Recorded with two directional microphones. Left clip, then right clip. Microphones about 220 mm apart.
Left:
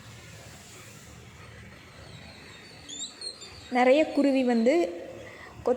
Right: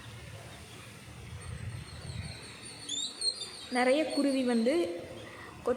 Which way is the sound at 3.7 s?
15° left (ahead or behind).